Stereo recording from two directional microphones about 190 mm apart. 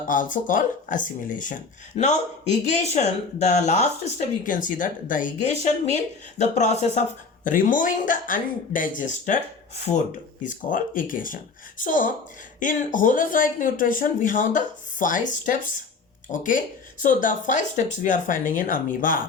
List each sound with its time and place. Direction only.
0.1 s speech: 45° left (ahead or behind)
10.4 s speech: 45° left (ahead or behind)